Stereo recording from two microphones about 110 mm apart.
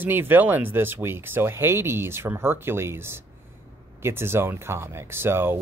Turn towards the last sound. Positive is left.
turn(degrees=-20)  # may be behind; listen again after turning